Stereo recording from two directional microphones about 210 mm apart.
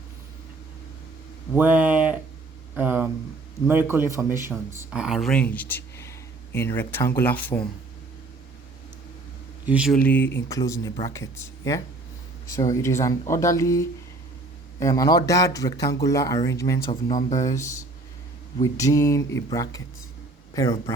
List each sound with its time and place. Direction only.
1.5 s speech: 10° right (ahead or behind)
2.7 s a sound: 10° right (ahead or behind)
3.7 s speech: 10° right (ahead or behind); by 7.6 s 10° left (ahead or behind)
9.6 s speech: 5° right (ahead or behind)
10.0 s a man's voice: 10° left (ahead or behind)